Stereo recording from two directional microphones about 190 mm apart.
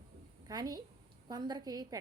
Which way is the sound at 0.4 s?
20° right (ahead or behind).